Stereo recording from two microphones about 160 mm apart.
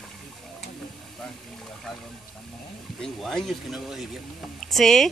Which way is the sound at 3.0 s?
5° left (ahead or behind).